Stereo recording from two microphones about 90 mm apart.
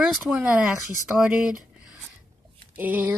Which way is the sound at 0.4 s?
15° right (ahead or behind).